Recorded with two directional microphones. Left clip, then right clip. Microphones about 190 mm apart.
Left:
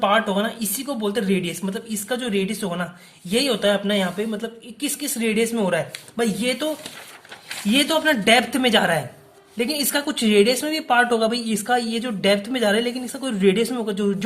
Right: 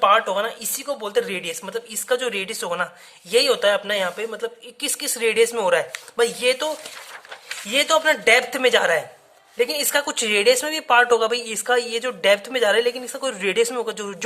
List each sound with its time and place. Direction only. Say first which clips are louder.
0.0 s speech: right 2 dB; 20° right (ahead or behind)
7.7 s speech: right 1 dB; 15° right (ahead or behind)